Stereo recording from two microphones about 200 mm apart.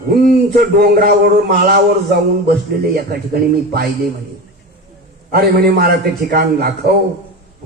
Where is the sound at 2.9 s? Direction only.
50° right (ahead or behind).